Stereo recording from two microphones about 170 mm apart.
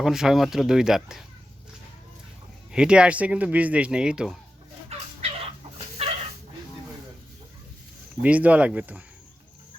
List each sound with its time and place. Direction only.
0.0 s speech: 5° right (ahead or behind)
2.7 s speech: 5° right (ahead or behind)
6.0 s dog: 35° right (ahead or behind)
8.2 s speech: 10° right (ahead or behind)